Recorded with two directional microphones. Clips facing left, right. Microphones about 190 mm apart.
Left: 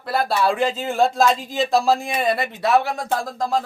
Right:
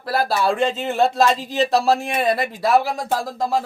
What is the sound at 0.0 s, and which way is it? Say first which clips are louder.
Speech: even; centre (ahead or behind).